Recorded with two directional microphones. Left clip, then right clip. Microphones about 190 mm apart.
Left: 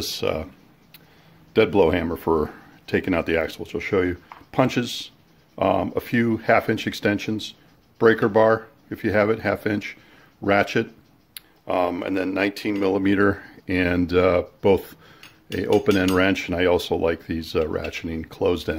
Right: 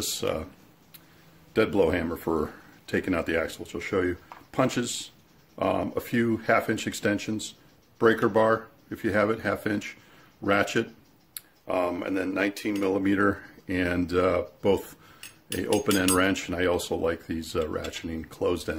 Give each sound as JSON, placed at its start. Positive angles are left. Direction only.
{"t": 0.0, "sound": "speech", "side_deg": 25}
{"t": 1.5, "sound": "speech", "side_deg": 30}
{"t": 15.8, "sound": "speech", "side_deg": 25}